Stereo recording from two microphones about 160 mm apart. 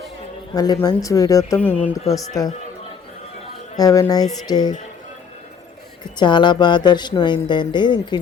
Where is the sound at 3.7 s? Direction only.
20° left (ahead or behind).